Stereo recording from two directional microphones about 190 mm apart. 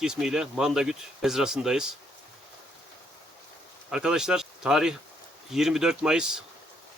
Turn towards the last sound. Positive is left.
turn(degrees=-5)  # may be behind; listen again after turning